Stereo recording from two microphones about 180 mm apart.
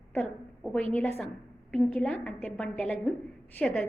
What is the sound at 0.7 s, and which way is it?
A woman's voice, 10° left (ahead or behind).